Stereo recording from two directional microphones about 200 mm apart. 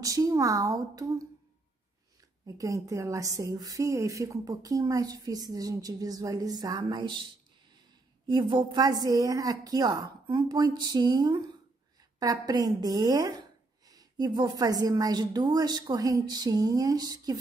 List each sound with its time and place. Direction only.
0.0 s a woman's voice: 15° right (ahead or behind)
2.4 s a woman's voice: 15° right (ahead or behind)
8.3 s speech: 25° right (ahead or behind)